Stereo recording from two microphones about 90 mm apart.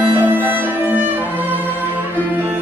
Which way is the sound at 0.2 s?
20° right (ahead or behind).